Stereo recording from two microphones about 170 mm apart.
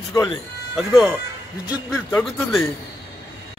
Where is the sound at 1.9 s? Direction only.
5° left (ahead or behind).